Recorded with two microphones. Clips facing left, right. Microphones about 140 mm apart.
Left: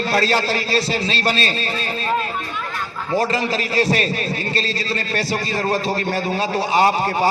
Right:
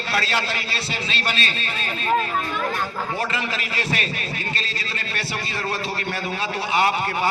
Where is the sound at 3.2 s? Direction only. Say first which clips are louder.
Left 11 dB; 35° left (ahead or behind).